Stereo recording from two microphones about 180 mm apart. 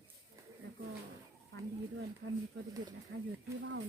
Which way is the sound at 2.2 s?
85° right.